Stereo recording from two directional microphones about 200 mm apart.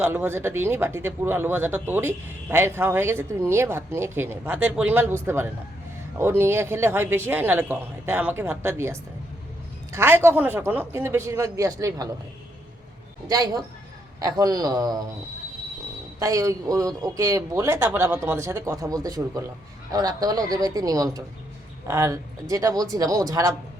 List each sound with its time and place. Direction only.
0.0 s speech: 10° right (ahead or behind)
13.2 s speech: 20° right (ahead or behind)
16.2 s speech: 15° right (ahead or behind)